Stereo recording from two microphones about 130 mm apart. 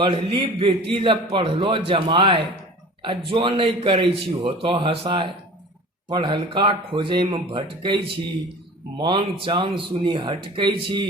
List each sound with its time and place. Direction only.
0.0 s a man's voice: 45° right (ahead or behind)